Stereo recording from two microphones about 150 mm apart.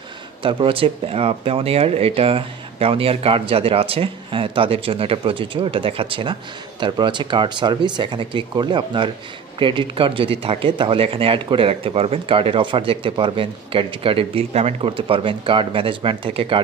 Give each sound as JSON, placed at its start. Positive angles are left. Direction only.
{"t": 0.4, "sound": "speech", "side_deg": -35}